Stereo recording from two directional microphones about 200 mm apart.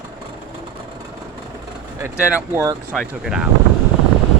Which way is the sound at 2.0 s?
10° right (ahead or behind).